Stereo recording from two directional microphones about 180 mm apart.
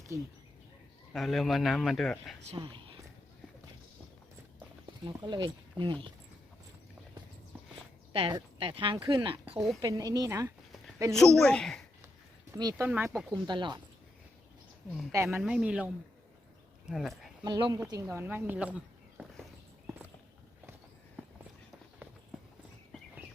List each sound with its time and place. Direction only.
0.1 s speech: 15° right (ahead or behind)
1.1 s a man's voice: centre (ahead or behind)
2.4 s speech: 30° right (ahead or behind)
5.0 s speech: 25° right (ahead or behind)
8.1 s speech: 25° right (ahead or behind)
11.1 s a man's voice: 5° left (ahead or behind)
12.8 s speech: 10° right (ahead or behind)
13.3 s speech: 25° right (ahead or behind)
15.1 s speech: 15° right (ahead or behind)
15.4 s a man's voice: 5° right (ahead or behind)
17.4 s speech: 25° right (ahead or behind); by 19.5 s 5° right (ahead or behind)